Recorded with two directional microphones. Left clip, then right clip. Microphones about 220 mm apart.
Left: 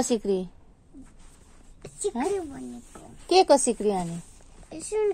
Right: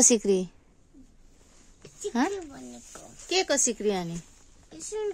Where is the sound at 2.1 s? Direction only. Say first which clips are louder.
Right 3 dB; 55° right (ahead or behind).